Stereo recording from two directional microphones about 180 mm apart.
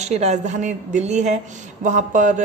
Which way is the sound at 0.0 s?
40° right (ahead or behind).